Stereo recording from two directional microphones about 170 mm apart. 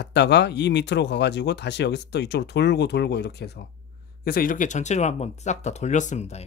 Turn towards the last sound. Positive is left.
turn(degrees=40)  # may be behind; listen again after turning